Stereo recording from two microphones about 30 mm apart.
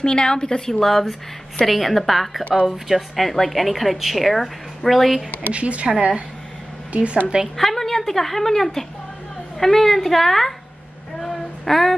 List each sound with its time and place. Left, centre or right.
0.0 s a woman's voice: left
0.7 s a woman's voice: centre
5.5 s a woman's voice: right
7.5 s a woman's voice: centre
11.1 s a sound: centre